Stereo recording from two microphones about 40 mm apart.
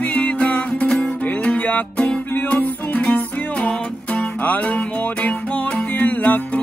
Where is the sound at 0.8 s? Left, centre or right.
Centre.